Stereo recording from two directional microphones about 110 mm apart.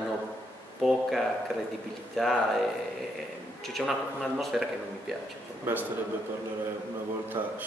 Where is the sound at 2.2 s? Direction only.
5° left (ahead or behind).